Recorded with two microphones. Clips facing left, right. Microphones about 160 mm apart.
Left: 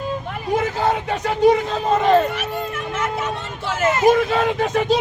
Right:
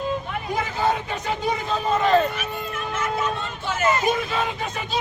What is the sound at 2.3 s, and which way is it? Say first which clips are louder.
Vehicle: left 4 dB; 85° left.